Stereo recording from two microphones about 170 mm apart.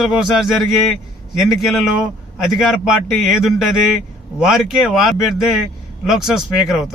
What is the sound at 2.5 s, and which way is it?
A man's voice, centre (ahead or behind).